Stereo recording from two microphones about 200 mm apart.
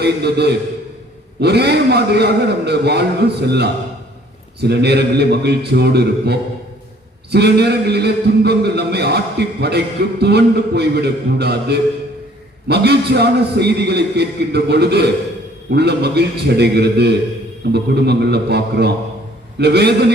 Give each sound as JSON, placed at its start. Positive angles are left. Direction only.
{"t": 0.0, "sound": "a man's voice", "side_deg": -55}